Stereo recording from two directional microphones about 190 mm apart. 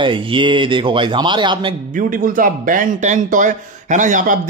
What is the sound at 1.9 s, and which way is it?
A man's voice, 45° right (ahead or behind).